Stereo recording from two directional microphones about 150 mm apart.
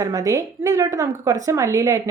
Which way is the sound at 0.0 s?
20° right (ahead or behind).